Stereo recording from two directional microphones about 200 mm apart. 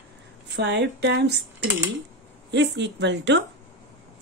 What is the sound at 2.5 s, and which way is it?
Speech, 60° right (ahead or behind).